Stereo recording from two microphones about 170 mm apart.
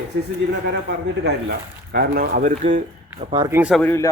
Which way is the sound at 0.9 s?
75° right (ahead or behind).